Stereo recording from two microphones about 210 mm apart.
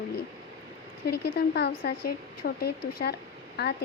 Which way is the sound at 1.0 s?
50° left (ahead or behind).